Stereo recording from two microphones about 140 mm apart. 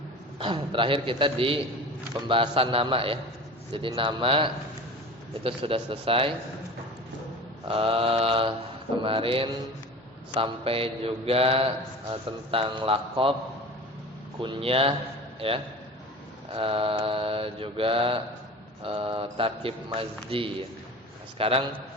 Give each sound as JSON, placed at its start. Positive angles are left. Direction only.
{"t": 0.3, "sound": "a man's voice", "side_deg": -35}
{"t": 7.7, "sound": "a man's voice", "side_deg": -40}
{"t": 14.4, "sound": "a man's voice", "side_deg": -40}